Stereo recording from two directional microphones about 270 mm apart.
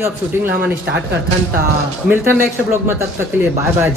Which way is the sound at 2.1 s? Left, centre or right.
Centre.